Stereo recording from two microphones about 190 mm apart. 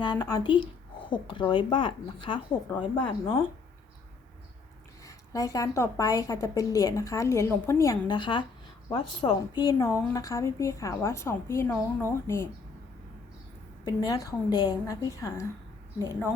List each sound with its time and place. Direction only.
0.0 s a woman's voice: 20° left (ahead or behind)
5.0 s a woman's voice: 15° left (ahead or behind)
13.8 s a woman's voice: 20° left (ahead or behind)